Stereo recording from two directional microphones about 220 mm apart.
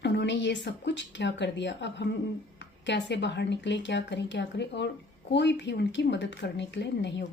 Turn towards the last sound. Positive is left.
turn(degrees=55)  # may be behind; listen again after turning